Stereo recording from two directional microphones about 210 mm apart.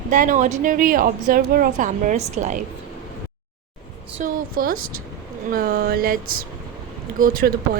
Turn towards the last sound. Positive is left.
turn(degrees=-45)  # may be behind; listen again after turning